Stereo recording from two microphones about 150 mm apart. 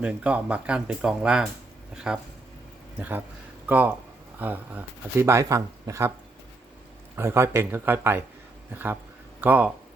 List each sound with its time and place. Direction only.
0.0 s speech: 5° right (ahead or behind)
7.2 s speech: 15° right (ahead or behind)